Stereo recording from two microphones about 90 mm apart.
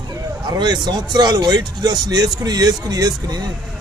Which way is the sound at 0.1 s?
50° right (ahead or behind).